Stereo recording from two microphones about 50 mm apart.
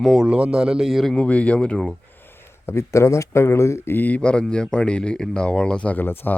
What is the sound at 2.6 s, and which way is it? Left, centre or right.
Speech, left.